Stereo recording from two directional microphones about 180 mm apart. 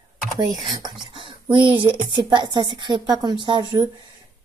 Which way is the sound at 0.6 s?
25° right (ahead or behind).